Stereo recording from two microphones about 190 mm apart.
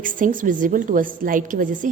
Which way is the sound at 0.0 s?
45° right (ahead or behind).